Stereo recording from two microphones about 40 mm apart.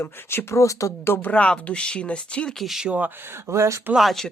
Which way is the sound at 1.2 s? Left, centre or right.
Left.